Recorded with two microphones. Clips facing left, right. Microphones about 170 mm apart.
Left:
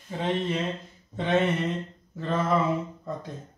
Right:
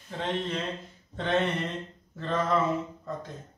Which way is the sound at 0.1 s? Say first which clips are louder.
Left 3 dB; 10° left (ahead or behind).